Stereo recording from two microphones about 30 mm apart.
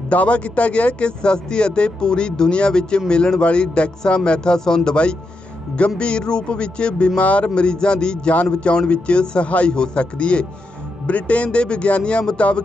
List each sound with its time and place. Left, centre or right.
0.1 s speech: left
5.8 s speech: left
7.2 s speech: left
7.4 s speech: left
9.4 s speech: left